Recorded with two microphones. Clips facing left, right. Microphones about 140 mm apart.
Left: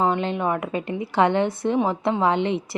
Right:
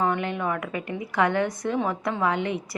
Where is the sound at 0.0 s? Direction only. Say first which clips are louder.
Left 3 dB; 25° left (ahead or behind).